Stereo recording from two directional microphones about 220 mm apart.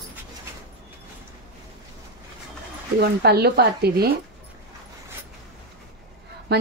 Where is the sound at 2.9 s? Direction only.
45° right (ahead or behind).